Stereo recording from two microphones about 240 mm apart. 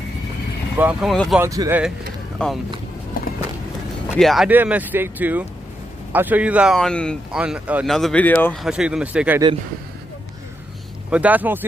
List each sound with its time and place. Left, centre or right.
0.7 s speech: centre
1.4 s speech: centre
4.2 s speech: centre
8.6 s speech: centre
11.1 s speech: centre